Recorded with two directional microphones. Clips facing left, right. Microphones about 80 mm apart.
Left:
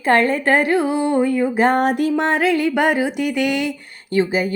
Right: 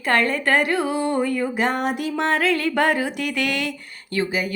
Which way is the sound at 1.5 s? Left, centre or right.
Left.